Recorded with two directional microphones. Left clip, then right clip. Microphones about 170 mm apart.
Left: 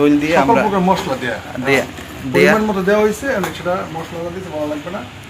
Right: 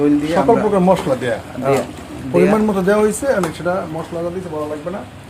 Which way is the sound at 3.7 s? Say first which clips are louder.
Even; 50° right (ahead or behind).